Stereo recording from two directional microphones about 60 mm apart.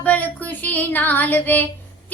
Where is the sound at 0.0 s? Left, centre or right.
Left.